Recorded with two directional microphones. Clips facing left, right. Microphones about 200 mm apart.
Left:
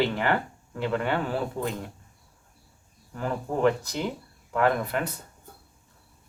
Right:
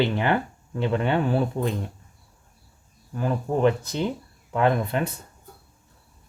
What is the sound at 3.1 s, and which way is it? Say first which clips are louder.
Speech: right 4 dB; 20° right (ahead or behind).